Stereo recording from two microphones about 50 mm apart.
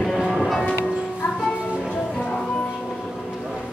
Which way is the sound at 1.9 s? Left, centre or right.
Centre.